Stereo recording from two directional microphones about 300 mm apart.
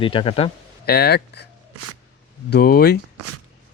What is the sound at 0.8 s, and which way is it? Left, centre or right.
Speech, left.